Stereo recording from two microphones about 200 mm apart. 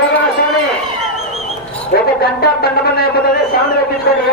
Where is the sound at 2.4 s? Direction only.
50° left (ahead or behind).